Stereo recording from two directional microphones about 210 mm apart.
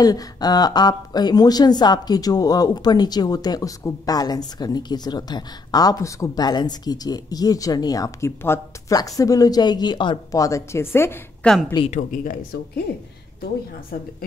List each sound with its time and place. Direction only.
0.0 s a woman's voice: 20° left (ahead or behind)
11.9 s speech: 40° left (ahead or behind)